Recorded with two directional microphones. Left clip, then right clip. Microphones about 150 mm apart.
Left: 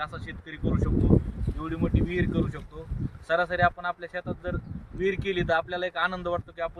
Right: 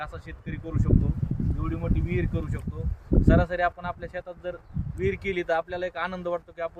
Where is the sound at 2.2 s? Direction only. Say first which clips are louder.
Left 3 dB; 5° right (ahead or behind).